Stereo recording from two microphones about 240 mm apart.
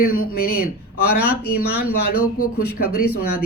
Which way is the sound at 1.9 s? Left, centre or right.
Left.